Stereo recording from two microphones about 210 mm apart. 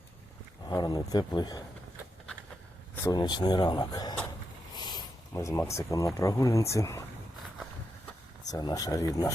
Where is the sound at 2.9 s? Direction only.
15° left (ahead or behind).